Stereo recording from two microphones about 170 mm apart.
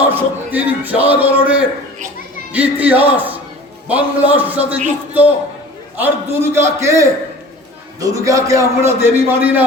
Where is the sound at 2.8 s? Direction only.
10° right (ahead or behind).